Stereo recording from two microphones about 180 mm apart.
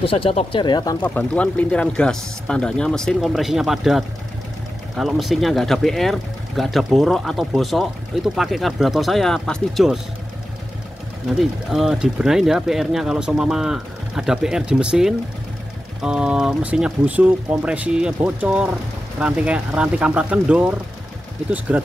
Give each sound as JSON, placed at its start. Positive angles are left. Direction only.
{"t": 0.0, "sound": "speech", "side_deg": 30}
{"t": 1.0, "sound": "speech", "side_deg": 10}
{"t": 11.3, "sound": "speech", "side_deg": 0}